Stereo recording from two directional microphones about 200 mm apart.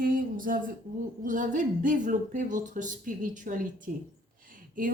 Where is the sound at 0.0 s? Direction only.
45° right (ahead or behind).